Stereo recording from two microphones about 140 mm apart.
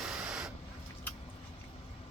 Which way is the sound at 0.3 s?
5° right (ahead or behind).